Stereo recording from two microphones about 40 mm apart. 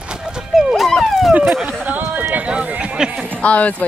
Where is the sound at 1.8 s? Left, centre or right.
Right.